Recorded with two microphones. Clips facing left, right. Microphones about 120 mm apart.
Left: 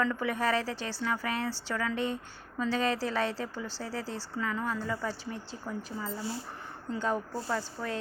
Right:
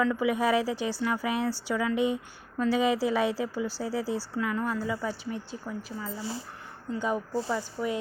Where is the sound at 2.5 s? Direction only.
5° right (ahead or behind).